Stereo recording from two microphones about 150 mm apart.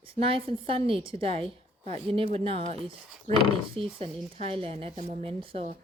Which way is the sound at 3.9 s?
40° right (ahead or behind).